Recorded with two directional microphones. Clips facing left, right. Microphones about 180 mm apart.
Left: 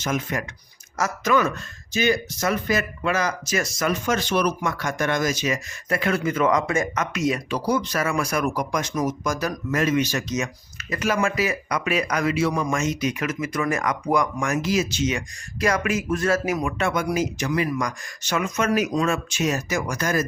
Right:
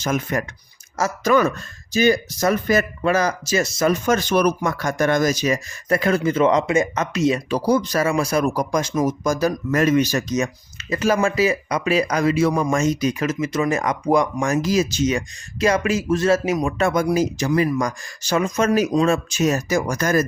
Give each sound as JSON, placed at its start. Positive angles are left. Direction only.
{"t": 0.0, "sound": "speech", "side_deg": -45}
{"t": 0.9, "sound": "speech", "side_deg": -30}
{"t": 4.0, "sound": "speech", "side_deg": -45}
{"t": 8.0, "sound": "speech", "side_deg": -25}
{"t": 9.7, "sound": "speech", "side_deg": -40}
{"t": 15.6, "sound": "speech", "side_deg": -25}
{"t": 16.7, "sound": "speech", "side_deg": -40}